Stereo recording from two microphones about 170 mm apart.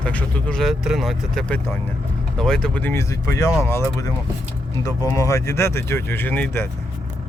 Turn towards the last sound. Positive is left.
turn(degrees=10)  # may be behind; listen again after turning